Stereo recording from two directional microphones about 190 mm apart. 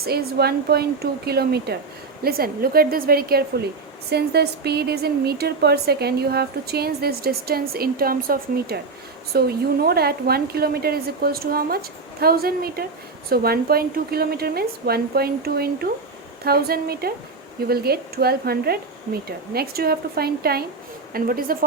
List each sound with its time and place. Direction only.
0.0 s a woman's voice: 55° right (ahead or behind)